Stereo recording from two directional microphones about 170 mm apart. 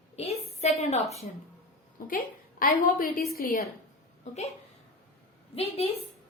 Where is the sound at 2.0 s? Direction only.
55° left (ahead or behind).